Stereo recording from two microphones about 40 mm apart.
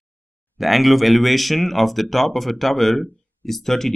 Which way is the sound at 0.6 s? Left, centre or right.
Centre.